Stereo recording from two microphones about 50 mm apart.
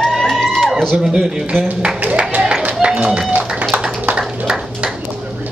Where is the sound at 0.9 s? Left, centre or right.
Centre.